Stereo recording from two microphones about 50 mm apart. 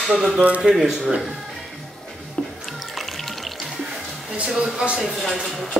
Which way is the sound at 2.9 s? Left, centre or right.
Centre.